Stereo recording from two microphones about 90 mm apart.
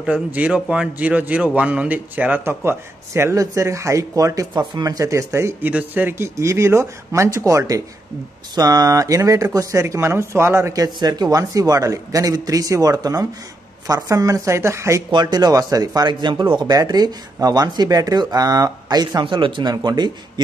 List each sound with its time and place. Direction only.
0.0 s speech: 15° right (ahead or behind); by 5.7 s 30° right (ahead or behind)
5.7 s speech: 20° right (ahead or behind)
15.0 s speech: 55° right (ahead or behind)
19.2 s speech: 70° right (ahead or behind)
19.7 s speech: 50° right (ahead or behind)